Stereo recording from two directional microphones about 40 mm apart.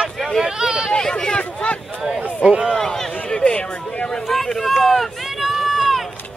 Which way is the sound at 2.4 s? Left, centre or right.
Right.